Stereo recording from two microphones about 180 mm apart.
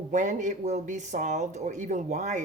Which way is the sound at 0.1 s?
45° right (ahead or behind).